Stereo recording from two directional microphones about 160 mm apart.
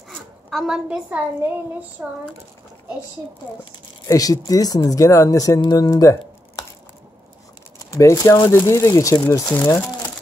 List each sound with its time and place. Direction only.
0.5 s a woman's voice: centre (ahead or behind)
4.1 s speech: 20° left (ahead or behind)
7.8 s speech: 20° left (ahead or behind)